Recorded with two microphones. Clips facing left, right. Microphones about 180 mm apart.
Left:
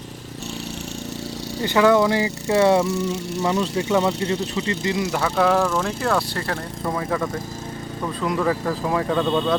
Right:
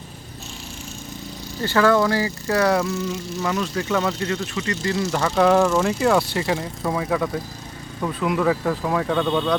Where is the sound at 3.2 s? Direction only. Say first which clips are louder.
Left 2 dB; 70° left (ahead or behind).